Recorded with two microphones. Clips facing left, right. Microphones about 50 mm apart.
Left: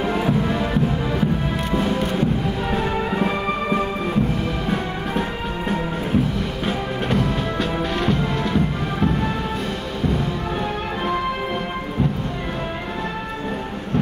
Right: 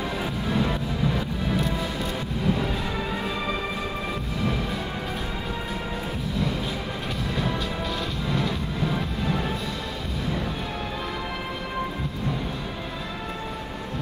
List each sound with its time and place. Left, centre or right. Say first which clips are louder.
0.1 s music: left 7 dB; left
6.3 s music: left 4 dB; left